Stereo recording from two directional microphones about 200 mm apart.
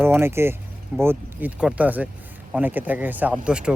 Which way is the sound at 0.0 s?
10° right (ahead or behind).